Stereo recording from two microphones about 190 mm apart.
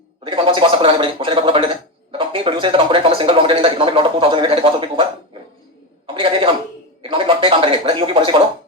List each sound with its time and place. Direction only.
0.3 s a man's voice: 25° right (ahead or behind)